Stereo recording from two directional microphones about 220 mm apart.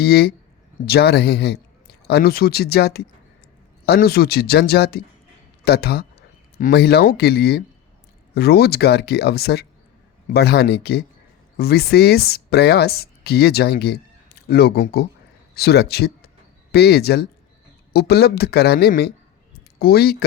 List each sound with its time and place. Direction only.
0.0 s speech: 45° left (ahead or behind)